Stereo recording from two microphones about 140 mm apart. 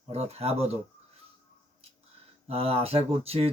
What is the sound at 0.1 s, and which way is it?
Speech, 50° right (ahead or behind).